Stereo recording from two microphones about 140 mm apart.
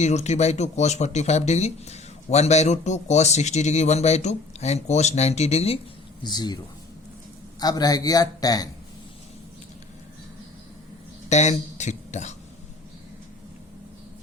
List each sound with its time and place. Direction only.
0.0 s speech: 55° left (ahead or behind)
6.2 s a man's voice: 30° left (ahead or behind)
7.6 s a man's voice: 25° left (ahead or behind)
11.3 s speech: 55° left (ahead or behind)